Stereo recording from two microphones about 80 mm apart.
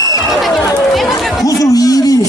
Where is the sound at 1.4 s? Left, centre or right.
Left.